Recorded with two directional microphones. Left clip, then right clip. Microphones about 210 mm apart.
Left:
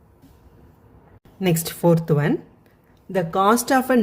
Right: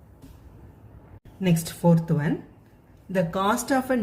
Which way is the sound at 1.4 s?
50° left (ahead or behind).